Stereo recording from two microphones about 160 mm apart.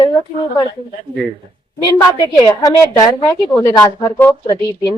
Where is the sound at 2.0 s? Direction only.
25° left (ahead or behind).